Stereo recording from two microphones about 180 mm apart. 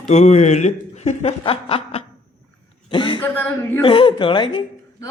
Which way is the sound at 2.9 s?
25° left (ahead or behind).